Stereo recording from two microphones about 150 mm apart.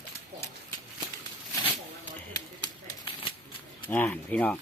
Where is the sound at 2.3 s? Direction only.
30° left (ahead or behind).